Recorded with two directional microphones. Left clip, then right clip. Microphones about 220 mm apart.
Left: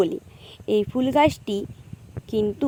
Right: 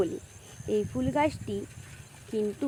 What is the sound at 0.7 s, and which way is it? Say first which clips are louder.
Speech: left 8 dB; 35° left (ahead or behind).